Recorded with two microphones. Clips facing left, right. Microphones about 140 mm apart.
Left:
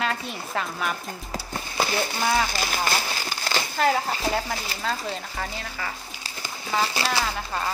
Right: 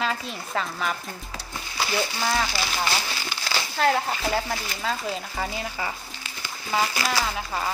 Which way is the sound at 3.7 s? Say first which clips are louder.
Right 1 dB; centre (ahead or behind).